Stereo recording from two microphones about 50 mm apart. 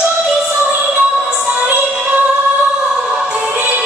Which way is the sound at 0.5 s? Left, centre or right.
Right.